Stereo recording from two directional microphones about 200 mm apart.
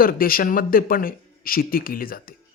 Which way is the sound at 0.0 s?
45° left (ahead or behind).